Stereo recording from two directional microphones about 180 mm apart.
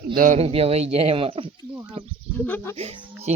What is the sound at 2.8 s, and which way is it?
Speech, 35° right (ahead or behind).